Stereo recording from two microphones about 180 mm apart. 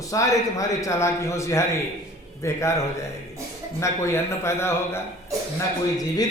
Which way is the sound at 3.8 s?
15° left (ahead or behind).